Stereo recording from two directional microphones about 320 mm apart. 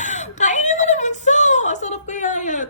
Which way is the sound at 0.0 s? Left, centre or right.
Left.